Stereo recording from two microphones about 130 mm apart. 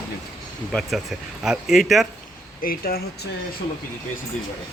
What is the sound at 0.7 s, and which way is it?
Speech, centre (ahead or behind).